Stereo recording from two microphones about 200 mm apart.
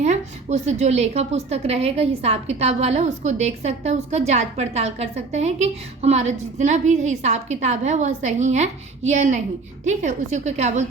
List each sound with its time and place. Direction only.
0.0 s a woman's voice: 35° right (ahead or behind)